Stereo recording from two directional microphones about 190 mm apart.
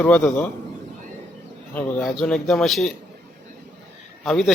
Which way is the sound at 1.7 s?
10° left (ahead or behind).